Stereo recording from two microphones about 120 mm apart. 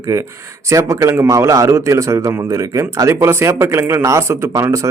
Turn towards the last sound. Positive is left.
turn(degrees=-25)  # may be behind; listen again after turning